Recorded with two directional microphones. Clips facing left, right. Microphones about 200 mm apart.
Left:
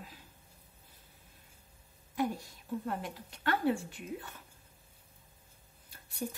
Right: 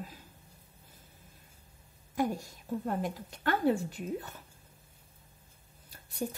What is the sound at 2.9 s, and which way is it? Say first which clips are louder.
A woman's voice: right 4 dB; 45° right (ahead or behind).